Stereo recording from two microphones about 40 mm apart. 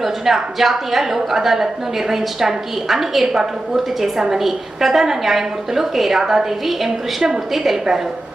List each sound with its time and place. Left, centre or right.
0.0 s a woman's voice: centre